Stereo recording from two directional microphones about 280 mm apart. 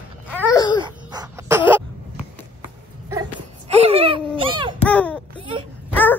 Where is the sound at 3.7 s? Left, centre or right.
Right.